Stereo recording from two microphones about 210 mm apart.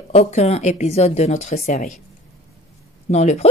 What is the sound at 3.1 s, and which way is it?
Speech, 30° left (ahead or behind).